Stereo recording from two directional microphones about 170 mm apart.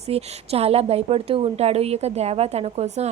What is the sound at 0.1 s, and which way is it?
Speech, 35° right (ahead or behind).